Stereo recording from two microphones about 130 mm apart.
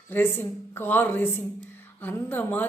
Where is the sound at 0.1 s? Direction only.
15° left (ahead or behind).